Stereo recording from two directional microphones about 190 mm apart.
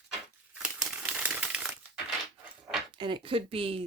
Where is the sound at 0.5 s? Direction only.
5° right (ahead or behind).